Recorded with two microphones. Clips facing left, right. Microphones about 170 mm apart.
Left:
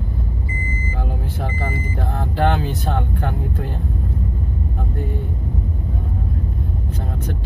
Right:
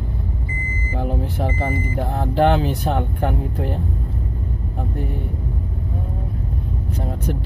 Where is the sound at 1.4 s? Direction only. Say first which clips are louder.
Right 1 dB; 20° right (ahead or behind).